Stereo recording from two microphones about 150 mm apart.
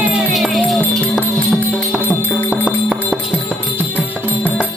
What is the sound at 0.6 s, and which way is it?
Speech, 5° left (ahead or behind).